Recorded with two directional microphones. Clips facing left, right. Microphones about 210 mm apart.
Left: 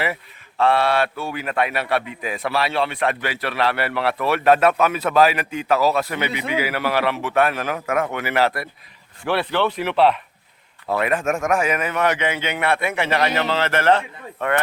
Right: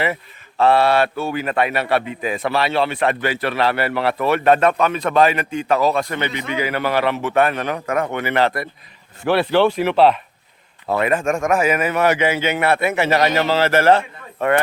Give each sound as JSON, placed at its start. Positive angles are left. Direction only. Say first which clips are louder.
{"t": 0.6, "sound": "speech", "louder": "right 3 dB", "side_deg": 0}
{"t": 9.2, "sound": "speech", "louder": "right 5 dB", "side_deg": -40}
{"t": 11.0, "sound": "speech", "louder": "right 3 dB", "side_deg": 0}